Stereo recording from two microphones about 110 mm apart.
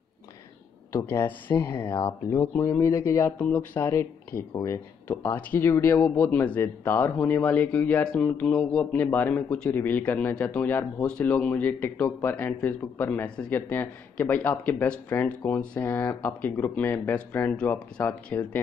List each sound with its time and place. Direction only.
1.0 s speech: 15° left (ahead or behind)
3.3 s speech: 15° left (ahead or behind)
8.9 s speech: 15° left (ahead or behind)